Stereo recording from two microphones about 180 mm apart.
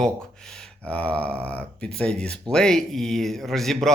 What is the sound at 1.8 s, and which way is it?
Speech, 5° left (ahead or behind).